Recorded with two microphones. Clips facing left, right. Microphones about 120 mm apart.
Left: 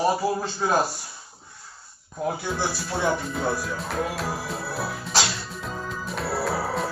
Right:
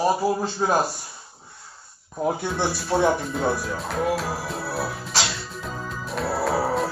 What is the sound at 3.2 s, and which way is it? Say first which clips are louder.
Music: right 2 dB; centre (ahead or behind).